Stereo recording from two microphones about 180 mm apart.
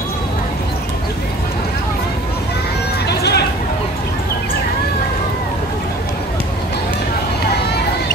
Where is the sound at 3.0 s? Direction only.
65° left (ahead or behind).